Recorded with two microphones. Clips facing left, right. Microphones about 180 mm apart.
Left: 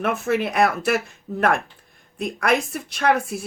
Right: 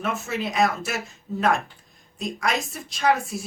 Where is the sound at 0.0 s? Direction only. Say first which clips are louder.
Left 6 dB; 60° left (ahead or behind).